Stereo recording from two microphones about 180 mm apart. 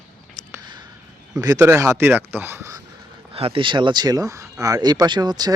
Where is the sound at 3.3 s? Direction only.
30° right (ahead or behind).